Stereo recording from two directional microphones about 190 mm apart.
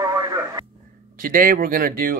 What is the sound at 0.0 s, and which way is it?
Radio, 20° right (ahead or behind).